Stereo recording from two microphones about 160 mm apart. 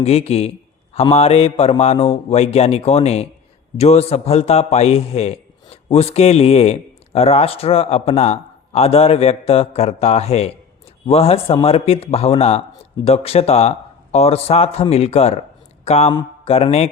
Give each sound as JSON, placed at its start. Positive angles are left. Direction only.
{"t": 0.0, "sound": "a man's voice", "side_deg": 40}